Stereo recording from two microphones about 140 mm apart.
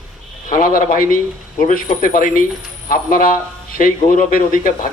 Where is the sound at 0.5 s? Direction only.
80° left.